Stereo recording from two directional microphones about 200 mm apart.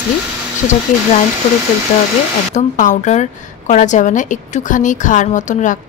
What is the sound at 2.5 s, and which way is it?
A woman's voice, 40° left (ahead or behind).